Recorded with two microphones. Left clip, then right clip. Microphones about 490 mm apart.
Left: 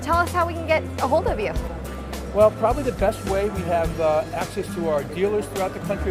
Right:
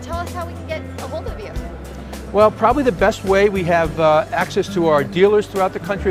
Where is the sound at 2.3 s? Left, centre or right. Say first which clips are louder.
Right 4 dB; right.